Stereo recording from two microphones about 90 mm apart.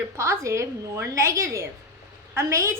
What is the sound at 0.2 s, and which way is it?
A woman's voice, 35° right (ahead or behind).